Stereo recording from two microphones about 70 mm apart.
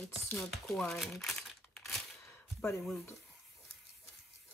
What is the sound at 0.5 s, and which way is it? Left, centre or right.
Speech, centre.